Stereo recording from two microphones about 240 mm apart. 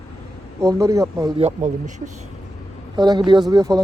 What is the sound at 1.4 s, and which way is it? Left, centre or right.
Speech, right.